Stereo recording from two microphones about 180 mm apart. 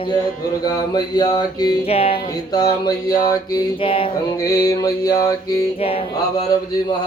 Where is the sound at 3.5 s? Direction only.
30° left (ahead or behind).